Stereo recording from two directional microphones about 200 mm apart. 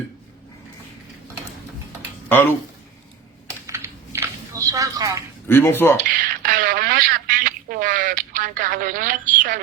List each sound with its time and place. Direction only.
2.3 s speech: 10° left (ahead or behind)
3.7 s a sound: 15° right (ahead or behind)
5.5 s speech: 10° left (ahead or behind)
6.0 s telephone: 45° right (ahead or behind)